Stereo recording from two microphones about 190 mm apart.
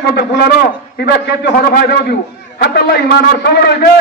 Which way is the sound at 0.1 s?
60° left (ahead or behind).